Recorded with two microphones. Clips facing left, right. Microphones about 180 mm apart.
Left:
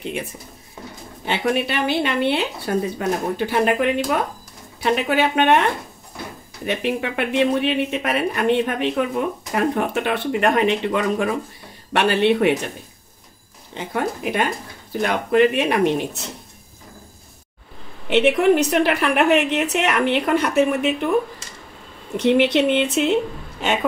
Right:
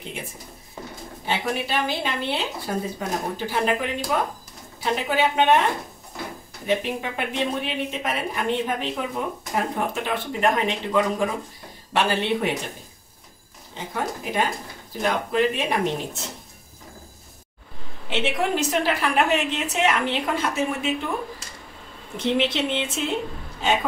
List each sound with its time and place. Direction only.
1.2 s a woman's voice: 65° left (ahead or behind)
13.7 s a woman's voice: 65° left (ahead or behind)
18.1 s a woman's voice: 60° left (ahead or behind)
22.1 s a woman's voice: 65° left (ahead or behind)